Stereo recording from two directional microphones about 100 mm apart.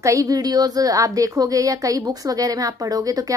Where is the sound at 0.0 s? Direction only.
35° right (ahead or behind).